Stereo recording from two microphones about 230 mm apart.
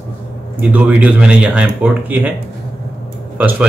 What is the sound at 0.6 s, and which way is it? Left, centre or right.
A man's voice, centre.